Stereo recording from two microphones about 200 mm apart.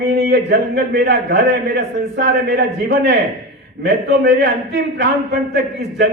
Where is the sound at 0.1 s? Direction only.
55° right (ahead or behind).